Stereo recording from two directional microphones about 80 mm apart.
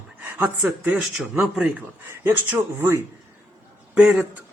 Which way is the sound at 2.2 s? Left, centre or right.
Right.